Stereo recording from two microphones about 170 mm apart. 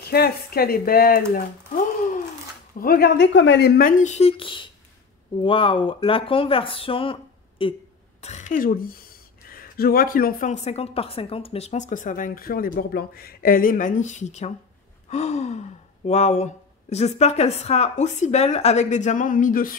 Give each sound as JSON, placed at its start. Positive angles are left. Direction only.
{"t": 0.0, "sound": "speech", "side_deg": 65}
{"t": 2.8, "sound": "a woman's voice", "side_deg": 65}
{"t": 4.0, "sound": "a woman's voice", "side_deg": 40}
{"t": 8.2, "sound": "speech", "side_deg": 40}
{"t": 10.5, "sound": "a woman's voice", "side_deg": 40}